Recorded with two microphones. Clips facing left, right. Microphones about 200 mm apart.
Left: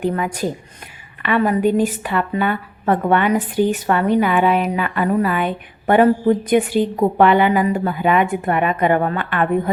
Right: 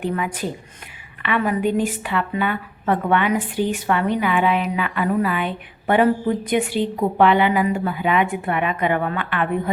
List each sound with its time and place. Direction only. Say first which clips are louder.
0.0 s a woman's voice: left 4 dB; 40° left (ahead or behind)